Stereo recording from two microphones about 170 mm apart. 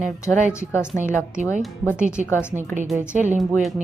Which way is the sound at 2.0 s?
5° right (ahead or behind).